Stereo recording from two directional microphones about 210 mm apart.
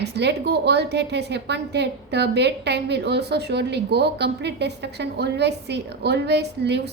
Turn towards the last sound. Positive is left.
turn(degrees=-55)  # may be behind; listen again after turning